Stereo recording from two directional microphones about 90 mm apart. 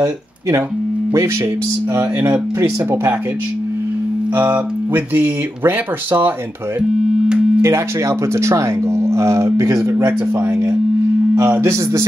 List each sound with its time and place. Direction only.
0.0 s speech: 30° right (ahead or behind)
2.0 s speech: 30° right (ahead or behind)
4.4 s speech: 20° right (ahead or behind)
7.6 s speech: 30° right (ahead or behind)